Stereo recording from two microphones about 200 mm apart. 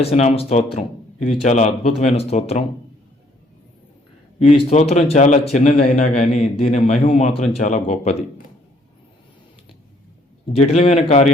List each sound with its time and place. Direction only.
0.0 s a man's voice: 30° left (ahead or behind)
4.4 s a man's voice: 35° left (ahead or behind)
10.5 s a man's voice: 30° left (ahead or behind)